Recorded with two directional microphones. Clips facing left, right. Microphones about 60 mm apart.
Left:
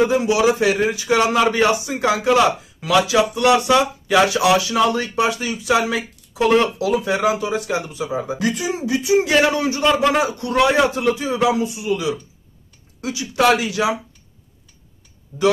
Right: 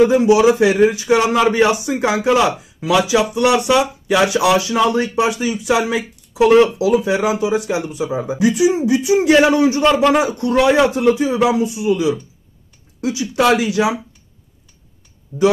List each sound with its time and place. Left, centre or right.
0.2 s speech: right; by 8.7 s centre
8.7 s speech: right